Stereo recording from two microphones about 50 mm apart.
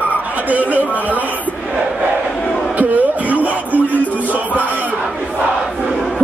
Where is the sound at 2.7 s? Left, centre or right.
Right.